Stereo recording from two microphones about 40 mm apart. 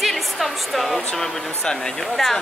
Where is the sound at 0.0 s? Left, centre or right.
Centre.